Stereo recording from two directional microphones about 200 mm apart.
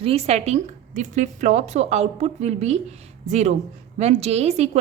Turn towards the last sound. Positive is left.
turn(degrees=-30)  # may be behind; listen again after turning